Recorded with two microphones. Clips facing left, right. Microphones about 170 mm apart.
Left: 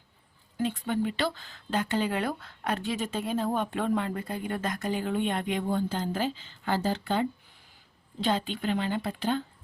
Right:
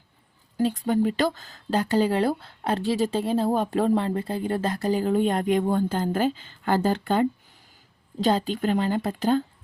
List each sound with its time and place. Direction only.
0.5 s speech: 40° right (ahead or behind)